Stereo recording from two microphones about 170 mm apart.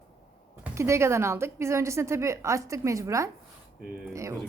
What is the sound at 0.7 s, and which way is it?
A woman's voice, 15° right (ahead or behind).